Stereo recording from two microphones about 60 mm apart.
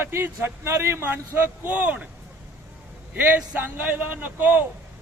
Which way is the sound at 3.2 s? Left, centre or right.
Right.